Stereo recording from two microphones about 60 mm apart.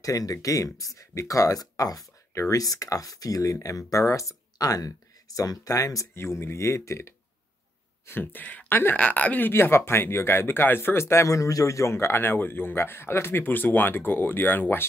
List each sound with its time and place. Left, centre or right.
0.0 s speech: left
2.5 s speech: left
6.1 s speech: left
8.1 s speech: left
9.5 s speech: left